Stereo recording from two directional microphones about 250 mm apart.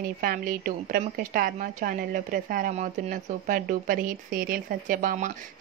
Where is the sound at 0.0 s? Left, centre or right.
Right.